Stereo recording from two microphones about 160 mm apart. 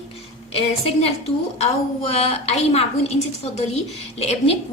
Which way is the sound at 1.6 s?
40° left (ahead or behind).